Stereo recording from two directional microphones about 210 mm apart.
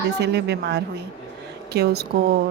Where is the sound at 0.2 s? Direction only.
50° right (ahead or behind).